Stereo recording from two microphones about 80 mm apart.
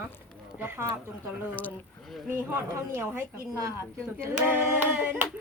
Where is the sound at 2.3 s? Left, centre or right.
Right.